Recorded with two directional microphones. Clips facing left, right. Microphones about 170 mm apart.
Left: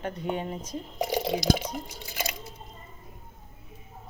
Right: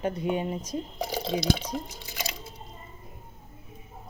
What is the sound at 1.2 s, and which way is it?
Speech, 15° left (ahead or behind).